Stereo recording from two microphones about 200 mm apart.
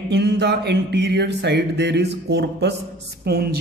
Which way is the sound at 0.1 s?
55° right (ahead or behind).